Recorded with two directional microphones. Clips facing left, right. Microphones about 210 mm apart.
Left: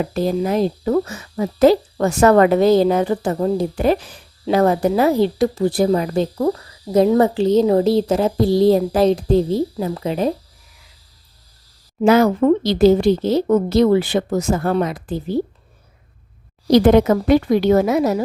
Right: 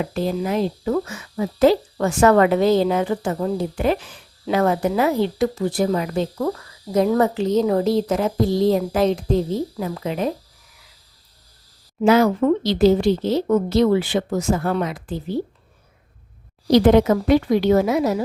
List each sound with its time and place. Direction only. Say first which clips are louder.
0.0 s speech: left 3 dB; 40° left (ahead or behind)
12.0 s speech: left 2 dB; 45° left (ahead or behind)
16.7 s a woman's voice: left 2 dB; 50° left (ahead or behind)